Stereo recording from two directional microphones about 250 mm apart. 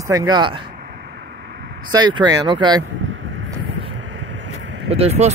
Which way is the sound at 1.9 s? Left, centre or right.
Centre.